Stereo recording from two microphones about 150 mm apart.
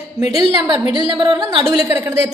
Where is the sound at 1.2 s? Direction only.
30° right (ahead or behind).